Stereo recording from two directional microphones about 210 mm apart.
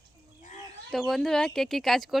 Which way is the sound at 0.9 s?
Centre (ahead or behind).